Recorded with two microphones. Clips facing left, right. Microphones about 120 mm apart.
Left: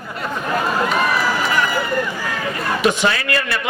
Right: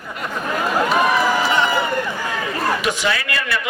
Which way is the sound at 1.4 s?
25° right (ahead or behind).